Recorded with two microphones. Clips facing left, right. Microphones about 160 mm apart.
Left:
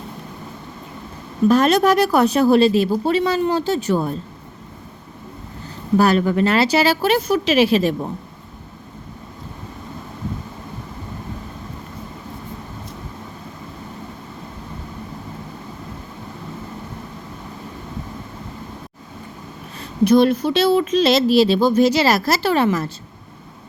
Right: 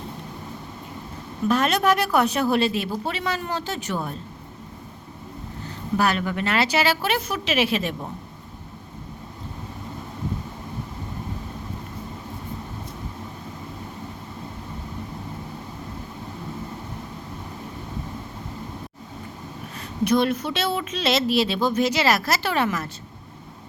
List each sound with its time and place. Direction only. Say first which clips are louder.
1.5 s speech: left 6 dB; 35° left (ahead or behind)
6.0 s speech: left 8 dB; 35° left (ahead or behind)
20.1 s speech: left 7 dB; 35° left (ahead or behind)